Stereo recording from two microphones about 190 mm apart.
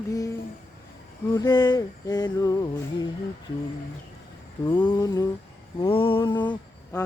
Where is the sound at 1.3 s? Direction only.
20° left (ahead or behind).